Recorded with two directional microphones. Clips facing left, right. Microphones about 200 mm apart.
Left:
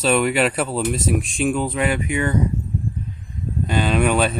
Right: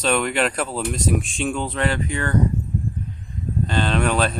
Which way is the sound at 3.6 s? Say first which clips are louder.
Left 3 dB; 10° left (ahead or behind).